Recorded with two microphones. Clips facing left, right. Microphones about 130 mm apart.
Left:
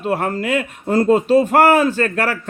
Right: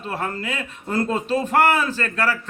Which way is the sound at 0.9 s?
40° left (ahead or behind).